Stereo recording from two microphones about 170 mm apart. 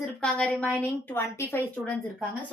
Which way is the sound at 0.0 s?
5° left (ahead or behind).